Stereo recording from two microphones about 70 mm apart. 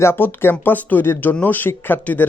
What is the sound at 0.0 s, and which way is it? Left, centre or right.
Speech, left.